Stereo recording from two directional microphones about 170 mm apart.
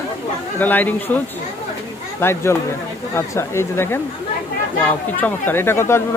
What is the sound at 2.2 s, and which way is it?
Speech, 15° left (ahead or behind).